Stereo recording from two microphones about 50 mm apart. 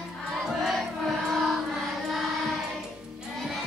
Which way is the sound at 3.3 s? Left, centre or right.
Centre.